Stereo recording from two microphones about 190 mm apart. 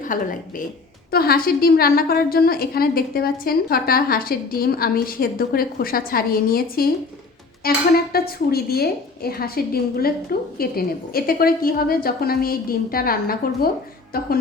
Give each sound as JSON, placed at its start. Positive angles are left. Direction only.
{"t": 0.0, "sound": "a woman's voice", "side_deg": 45}